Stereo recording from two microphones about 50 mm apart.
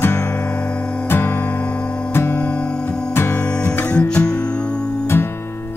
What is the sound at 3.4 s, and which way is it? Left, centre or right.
Music, left.